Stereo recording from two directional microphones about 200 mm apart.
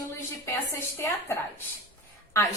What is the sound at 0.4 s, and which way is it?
Speech, 15° left (ahead or behind).